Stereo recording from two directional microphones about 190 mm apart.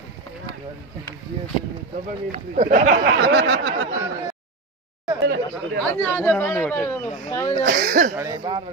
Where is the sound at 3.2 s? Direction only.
65° right (ahead or behind).